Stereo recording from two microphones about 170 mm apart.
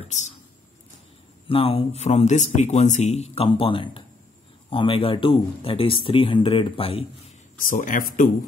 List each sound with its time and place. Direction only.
1.5 s speech: 30° left (ahead or behind)
7.6 s speech: 50° left (ahead or behind)